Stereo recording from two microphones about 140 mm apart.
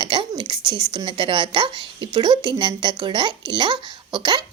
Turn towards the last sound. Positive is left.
turn(degrees=-30)  # may be behind; listen again after turning